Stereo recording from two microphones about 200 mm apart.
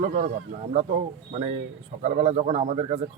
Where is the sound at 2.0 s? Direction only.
35° right (ahead or behind).